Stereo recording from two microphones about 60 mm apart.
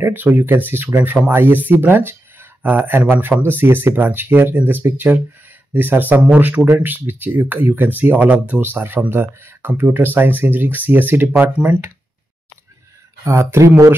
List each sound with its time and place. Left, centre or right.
0.0 s speech: right
0.9 s speech: right
1.3 s speech: right
11.6 s speech: right
13.2 s speech: right